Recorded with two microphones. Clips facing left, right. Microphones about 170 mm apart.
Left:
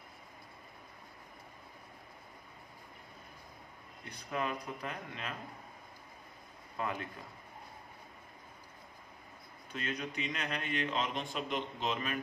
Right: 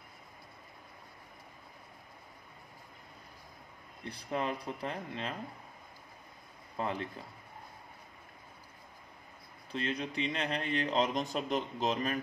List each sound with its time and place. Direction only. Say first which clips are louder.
4.0 s speech: right 2 dB; 30° right (ahead or behind)
6.8 s speech: right 2 dB; 30° right (ahead or behind)
9.7 s speech: right 4 dB; 30° right (ahead or behind)